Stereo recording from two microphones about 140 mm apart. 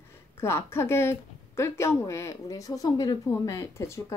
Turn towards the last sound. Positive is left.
turn(degrees=20)  # may be behind; listen again after turning